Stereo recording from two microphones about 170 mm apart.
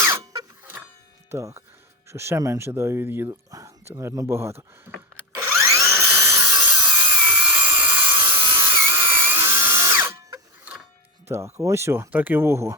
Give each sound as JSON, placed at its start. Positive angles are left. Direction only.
{"t": 0.0, "sound": "a sound", "side_deg": -15}
{"t": 1.3, "sound": "speech", "side_deg": -15}
{"t": 4.9, "sound": "a sound", "side_deg": -10}
{"t": 6.8, "sound": "sawing", "side_deg": -10}
{"t": 8.4, "sound": "drill", "side_deg": -15}
{"t": 11.3, "sound": "speech", "side_deg": -15}